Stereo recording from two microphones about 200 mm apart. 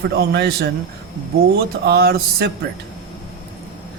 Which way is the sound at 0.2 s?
55° right (ahead or behind).